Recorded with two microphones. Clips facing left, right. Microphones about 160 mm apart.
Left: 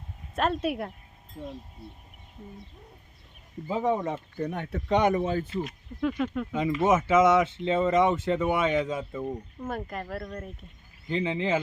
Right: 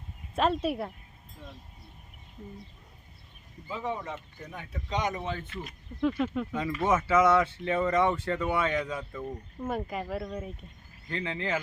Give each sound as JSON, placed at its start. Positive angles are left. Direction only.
{"t": 0.3, "sound": "speech", "side_deg": 5}
{"t": 3.7, "sound": "speech", "side_deg": 40}
{"t": 4.4, "sound": "speech", "side_deg": 65}
{"t": 5.6, "sound": "speech", "side_deg": 0}
{"t": 6.5, "sound": "speech", "side_deg": 20}
{"t": 9.6, "sound": "speech", "side_deg": -5}
{"t": 11.1, "sound": "speech", "side_deg": 20}